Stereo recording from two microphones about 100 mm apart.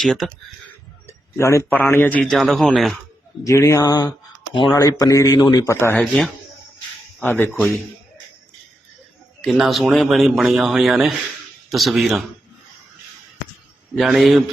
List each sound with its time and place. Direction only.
0.0 s speech: centre (ahead or behind)
1.0 s speech: 25° left (ahead or behind)
2.3 s speech: centre (ahead or behind)
3.4 s a man's voice: 30° left (ahead or behind)
6.0 s speech: 5° left (ahead or behind)
7.2 s speech: 20° left (ahead or behind)
9.4 s speech: centre (ahead or behind)
13.9 s speech: centre (ahead or behind)